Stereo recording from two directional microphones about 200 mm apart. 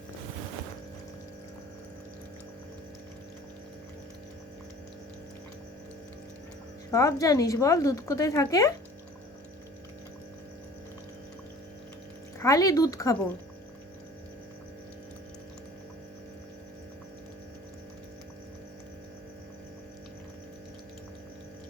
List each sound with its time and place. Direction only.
6.9 s speech: 15° left (ahead or behind)
12.4 s speech: 15° left (ahead or behind)